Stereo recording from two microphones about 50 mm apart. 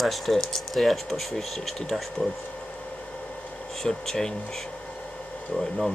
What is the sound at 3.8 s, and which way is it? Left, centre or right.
Speech, centre.